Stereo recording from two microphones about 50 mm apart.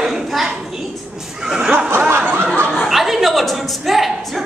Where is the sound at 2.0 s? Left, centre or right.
Right.